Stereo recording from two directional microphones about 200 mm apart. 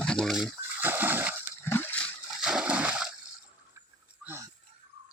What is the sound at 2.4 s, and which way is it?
Splash, 5° right (ahead or behind).